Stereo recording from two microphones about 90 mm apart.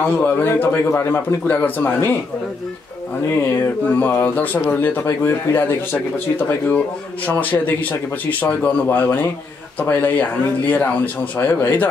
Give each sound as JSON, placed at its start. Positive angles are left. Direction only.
{"t": 0.0, "sound": "speech", "side_deg": 20}
{"t": 3.3, "sound": "speech", "side_deg": 30}
{"t": 7.2, "sound": "speech", "side_deg": 20}
{"t": 11.3, "sound": "speech", "side_deg": 20}